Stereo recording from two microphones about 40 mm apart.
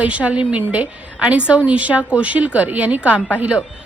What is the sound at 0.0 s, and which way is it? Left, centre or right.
A woman's voice, right.